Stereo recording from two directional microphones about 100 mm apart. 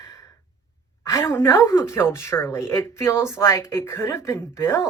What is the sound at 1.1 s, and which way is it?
Speech, 25° left (ahead or behind).